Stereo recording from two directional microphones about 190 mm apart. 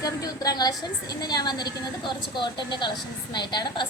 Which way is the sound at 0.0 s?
20° left (ahead or behind).